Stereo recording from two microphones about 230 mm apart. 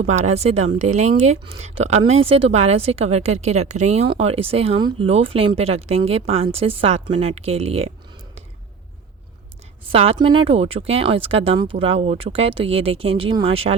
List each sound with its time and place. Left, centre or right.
0.0 s speech: right
9.9 s speech: right